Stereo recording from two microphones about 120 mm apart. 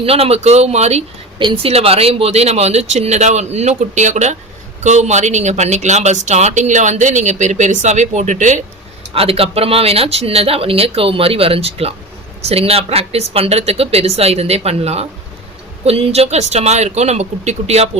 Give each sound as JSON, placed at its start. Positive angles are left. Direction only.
{"t": 0.0, "sound": "speech", "side_deg": -55}
{"t": 1.4, "sound": "speech", "side_deg": -40}
{"t": 1.7, "sound": "speech", "side_deg": -55}
{"t": 9.1, "sound": "speech", "side_deg": -55}